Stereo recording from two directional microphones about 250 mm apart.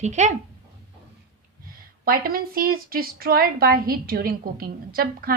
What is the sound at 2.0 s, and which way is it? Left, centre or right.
A woman's voice, right.